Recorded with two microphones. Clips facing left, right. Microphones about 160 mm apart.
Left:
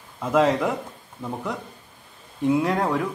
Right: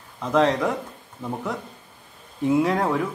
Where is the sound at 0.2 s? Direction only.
5° left (ahead or behind).